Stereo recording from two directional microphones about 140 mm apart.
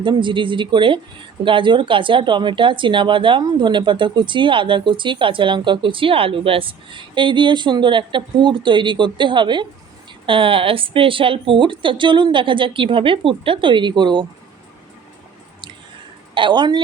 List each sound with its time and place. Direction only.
0.0 s speech: 35° right (ahead or behind)
16.3 s speech: 35° right (ahead or behind)